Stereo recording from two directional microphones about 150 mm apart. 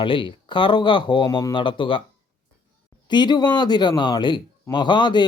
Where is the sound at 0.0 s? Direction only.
35° left (ahead or behind).